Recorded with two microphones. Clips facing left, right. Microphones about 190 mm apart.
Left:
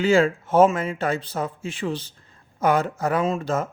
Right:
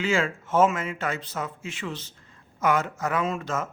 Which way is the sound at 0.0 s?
35° left (ahead or behind).